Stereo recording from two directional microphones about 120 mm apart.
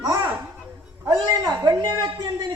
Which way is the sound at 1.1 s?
35° right (ahead or behind).